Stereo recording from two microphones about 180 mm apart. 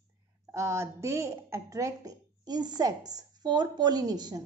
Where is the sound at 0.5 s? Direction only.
15° right (ahead or behind).